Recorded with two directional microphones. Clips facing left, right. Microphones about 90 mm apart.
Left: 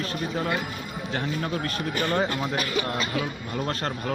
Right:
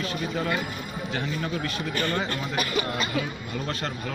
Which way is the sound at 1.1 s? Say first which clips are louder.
Left 2 dB; 40° left (ahead or behind).